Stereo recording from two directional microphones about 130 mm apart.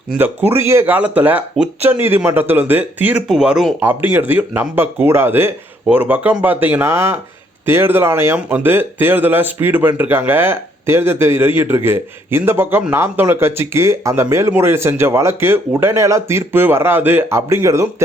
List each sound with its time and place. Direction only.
0.2 s speech: 15° right (ahead or behind)
3.8 s speech: 15° right (ahead or behind)